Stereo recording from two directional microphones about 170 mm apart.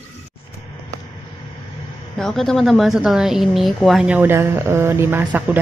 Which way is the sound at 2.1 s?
5° left (ahead or behind).